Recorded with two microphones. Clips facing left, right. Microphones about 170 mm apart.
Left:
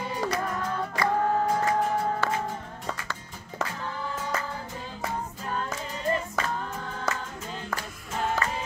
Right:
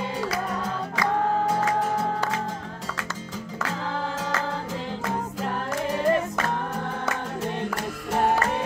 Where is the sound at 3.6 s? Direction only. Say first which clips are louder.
Right 5 dB; 90° right.